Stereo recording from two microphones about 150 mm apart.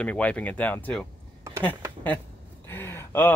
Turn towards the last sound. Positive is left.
turn(degrees=15)  # may be behind; listen again after turning